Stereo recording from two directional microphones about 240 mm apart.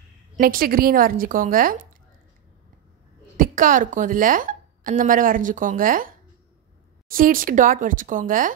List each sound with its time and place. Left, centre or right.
0.4 s a woman's voice: right
3.3 s a woman's voice: right